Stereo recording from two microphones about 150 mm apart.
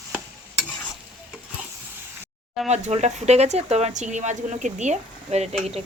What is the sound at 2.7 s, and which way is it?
Speech, 50° right (ahead or behind).